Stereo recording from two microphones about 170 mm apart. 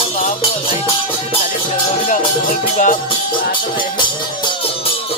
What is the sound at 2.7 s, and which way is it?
Music, 50° left (ahead or behind).